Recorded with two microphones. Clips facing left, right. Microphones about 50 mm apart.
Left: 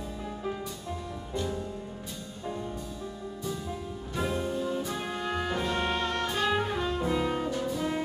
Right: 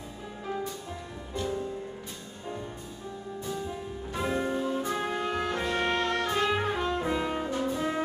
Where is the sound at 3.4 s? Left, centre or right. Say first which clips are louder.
Right 1 dB; right.